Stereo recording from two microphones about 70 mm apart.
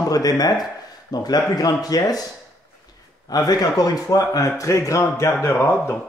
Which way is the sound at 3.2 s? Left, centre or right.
Left.